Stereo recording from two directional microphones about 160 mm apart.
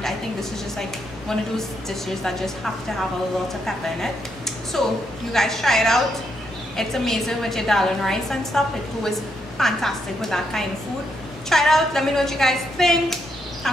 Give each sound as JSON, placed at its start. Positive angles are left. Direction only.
{"t": 0.0, "sound": "a woman's voice", "side_deg": 0}